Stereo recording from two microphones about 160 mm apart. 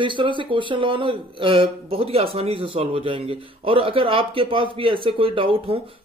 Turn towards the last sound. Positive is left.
turn(degrees=-35)  # may be behind; listen again after turning